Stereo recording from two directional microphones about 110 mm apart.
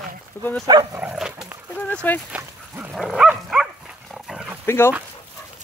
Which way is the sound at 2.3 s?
15° right (ahead or behind).